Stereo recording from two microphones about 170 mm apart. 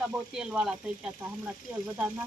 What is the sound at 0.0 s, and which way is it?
Speech, 5° right (ahead or behind).